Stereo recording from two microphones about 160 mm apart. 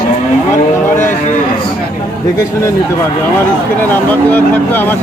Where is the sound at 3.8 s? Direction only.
10° left (ahead or behind).